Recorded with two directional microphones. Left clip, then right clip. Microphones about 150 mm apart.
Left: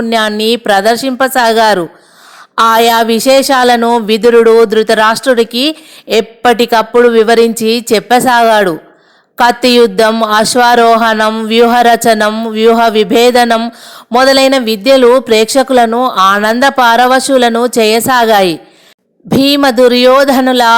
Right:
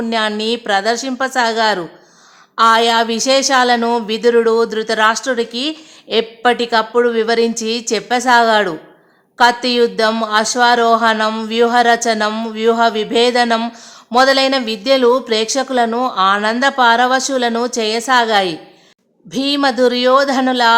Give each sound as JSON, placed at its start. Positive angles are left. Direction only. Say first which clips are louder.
{"t": 0.1, "sound": "speech", "louder": "left 7 dB", "side_deg": 35}